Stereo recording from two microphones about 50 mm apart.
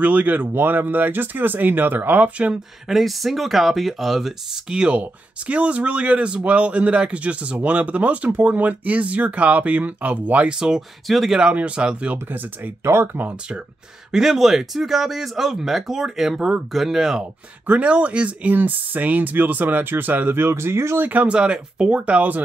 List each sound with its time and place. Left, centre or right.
0.0 s speech: right
2.9 s speech: centre
4.6 s speech: right
10.5 s speech: centre
11.5 s speech: right
12.3 s speech: right
14.1 s speech: centre
17.6 s speech: right
20.3 s speech: right
21.0 s speech: right
21.3 s speech: right